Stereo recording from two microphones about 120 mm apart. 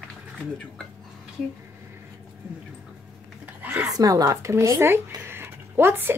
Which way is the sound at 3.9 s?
30° right (ahead or behind).